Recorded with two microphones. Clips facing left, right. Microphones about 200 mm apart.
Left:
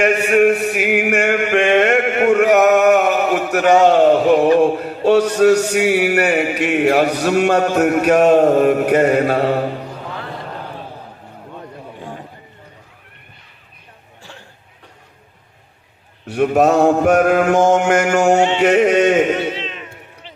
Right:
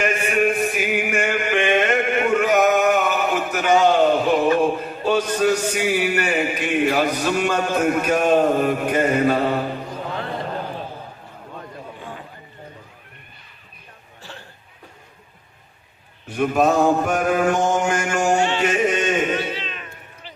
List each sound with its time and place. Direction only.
0.0 s a sound: 70° left (ahead or behind)
4.6 s mantra: 70° left (ahead or behind)
16.2 s mantra: 70° left (ahead or behind)